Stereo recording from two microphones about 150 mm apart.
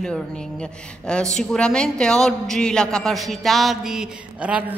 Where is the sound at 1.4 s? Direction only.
5° left (ahead or behind).